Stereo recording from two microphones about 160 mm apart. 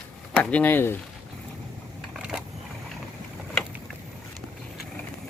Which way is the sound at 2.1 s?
5° right (ahead or behind).